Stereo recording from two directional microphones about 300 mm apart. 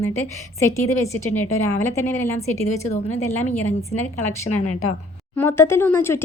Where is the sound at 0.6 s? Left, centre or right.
Centre.